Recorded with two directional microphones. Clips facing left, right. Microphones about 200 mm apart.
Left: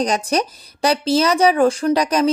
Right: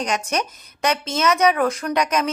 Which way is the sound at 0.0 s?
35° left (ahead or behind).